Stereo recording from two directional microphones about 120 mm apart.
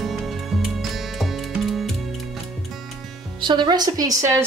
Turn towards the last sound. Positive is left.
turn(degrees=-30)  # may be behind; listen again after turning